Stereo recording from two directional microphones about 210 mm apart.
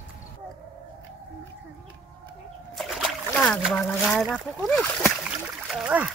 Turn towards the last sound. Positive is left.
turn(degrees=-5)  # may be behind; listen again after turning